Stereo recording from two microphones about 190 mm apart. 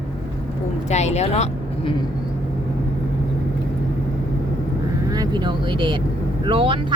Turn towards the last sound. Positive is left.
turn(degrees=-25)  # may be behind; listen again after turning